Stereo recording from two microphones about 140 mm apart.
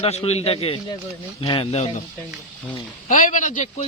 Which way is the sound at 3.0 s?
70° left (ahead or behind).